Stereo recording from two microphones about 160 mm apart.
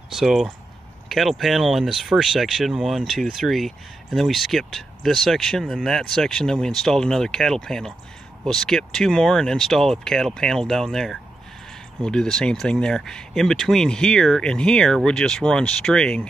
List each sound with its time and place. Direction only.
0.1 s speech: centre (ahead or behind)
1.0 s vehicle: centre (ahead or behind)
1.4 s speech: centre (ahead or behind)